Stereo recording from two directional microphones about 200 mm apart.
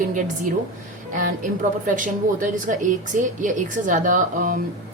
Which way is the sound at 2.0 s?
40° right (ahead or behind).